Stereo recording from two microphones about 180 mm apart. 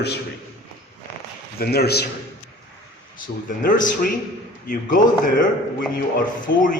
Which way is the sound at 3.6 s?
50° left (ahead or behind).